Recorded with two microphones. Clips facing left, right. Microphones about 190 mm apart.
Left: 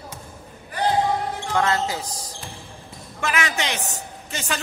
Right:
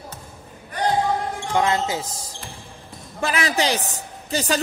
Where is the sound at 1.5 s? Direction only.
20° right (ahead or behind); by 4.5 s 35° right (ahead or behind).